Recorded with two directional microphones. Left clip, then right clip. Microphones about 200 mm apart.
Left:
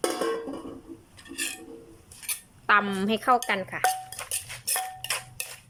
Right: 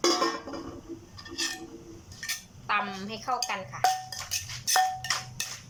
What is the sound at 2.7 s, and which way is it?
A woman's voice, 40° left (ahead or behind).